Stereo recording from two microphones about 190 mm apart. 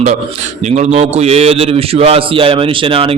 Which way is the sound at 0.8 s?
35° right (ahead or behind).